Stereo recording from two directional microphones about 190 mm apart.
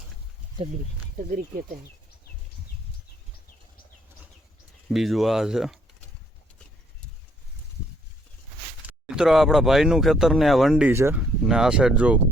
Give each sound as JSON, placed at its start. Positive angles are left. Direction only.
{"t": 1.3, "sound": "speech", "side_deg": -50}
{"t": 4.9, "sound": "speech", "side_deg": 0}
{"t": 8.9, "sound": "speech", "side_deg": -5}